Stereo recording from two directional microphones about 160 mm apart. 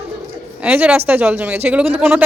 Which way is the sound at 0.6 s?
5° right (ahead or behind).